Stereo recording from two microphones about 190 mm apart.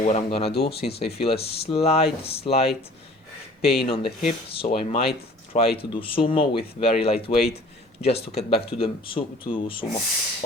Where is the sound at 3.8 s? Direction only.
30° left (ahead or behind).